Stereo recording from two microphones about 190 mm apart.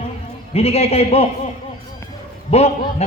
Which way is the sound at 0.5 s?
30° left (ahead or behind).